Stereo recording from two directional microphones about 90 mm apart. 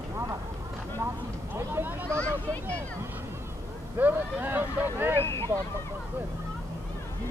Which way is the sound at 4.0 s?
20° right (ahead or behind).